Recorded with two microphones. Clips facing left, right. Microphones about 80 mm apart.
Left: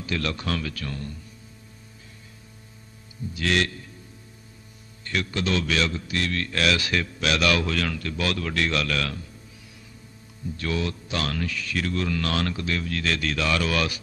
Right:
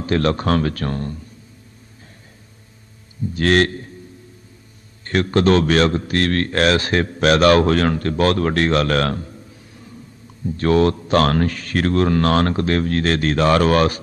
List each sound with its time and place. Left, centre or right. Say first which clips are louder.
0.0 s a man's voice: right 10 dB; right
3.3 s a man's voice: right 8 dB; right
5.0 s a man's voice: right 11 dB; right
10.6 s a man's voice: right 13 dB; right